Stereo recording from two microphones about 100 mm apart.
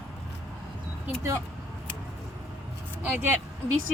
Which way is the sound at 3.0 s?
20° right (ahead or behind).